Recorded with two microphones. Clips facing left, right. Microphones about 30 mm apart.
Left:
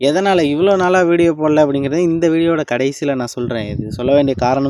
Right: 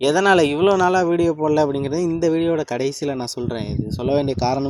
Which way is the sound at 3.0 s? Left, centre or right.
Left.